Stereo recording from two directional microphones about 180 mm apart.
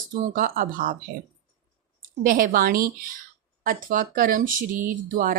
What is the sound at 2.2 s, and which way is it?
Speech, 50° right (ahead or behind).